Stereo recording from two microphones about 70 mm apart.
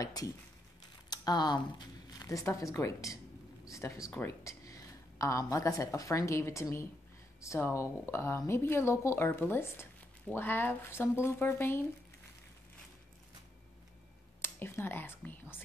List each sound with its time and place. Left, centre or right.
0.0 s speech: left
1.1 s a sound: left
2.2 s a woman's voice: left
14.4 s speech: left